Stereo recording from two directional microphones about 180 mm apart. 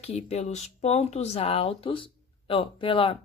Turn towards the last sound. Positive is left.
turn(degrees=30)  # may be behind; listen again after turning